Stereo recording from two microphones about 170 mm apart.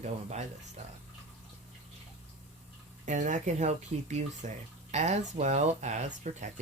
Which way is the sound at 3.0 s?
45° right (ahead or behind).